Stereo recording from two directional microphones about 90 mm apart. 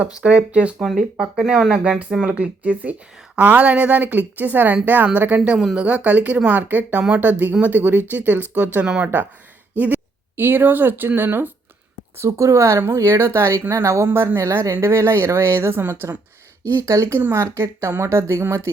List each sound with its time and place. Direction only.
0.2 s speech: 15° right (ahead or behind)
5.5 s speech: 10° right (ahead or behind); by 18.7 s 30° right (ahead or behind)